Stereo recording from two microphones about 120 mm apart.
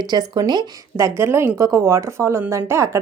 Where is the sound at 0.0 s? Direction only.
35° right (ahead or behind).